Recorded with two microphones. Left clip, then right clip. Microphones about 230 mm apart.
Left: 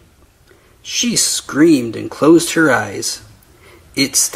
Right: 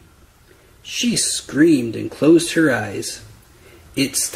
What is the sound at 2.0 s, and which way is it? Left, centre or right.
Speech, centre.